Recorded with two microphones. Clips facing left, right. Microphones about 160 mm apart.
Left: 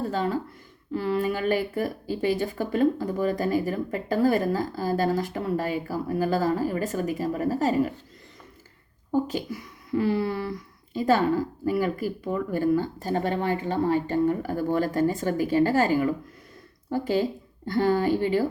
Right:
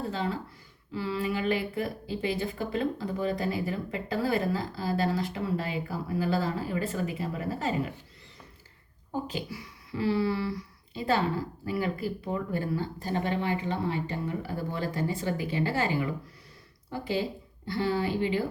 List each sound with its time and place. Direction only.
0.1 s speech: 45° left (ahead or behind)
9.2 s speech: 45° left (ahead or behind)